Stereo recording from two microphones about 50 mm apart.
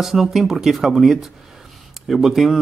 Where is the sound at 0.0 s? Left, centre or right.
Centre.